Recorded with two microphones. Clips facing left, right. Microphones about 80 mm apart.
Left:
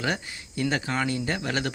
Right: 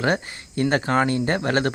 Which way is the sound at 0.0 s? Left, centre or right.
Right.